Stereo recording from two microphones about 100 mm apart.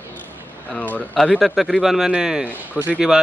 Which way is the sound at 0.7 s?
15° left (ahead or behind).